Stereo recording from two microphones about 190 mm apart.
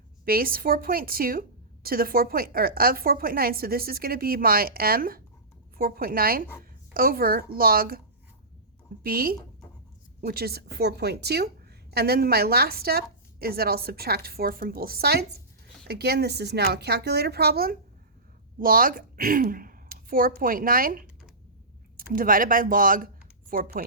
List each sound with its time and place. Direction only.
0.3 s a woman's voice: 50° right (ahead or behind)
9.0 s a woman's voice: 50° right (ahead or behind)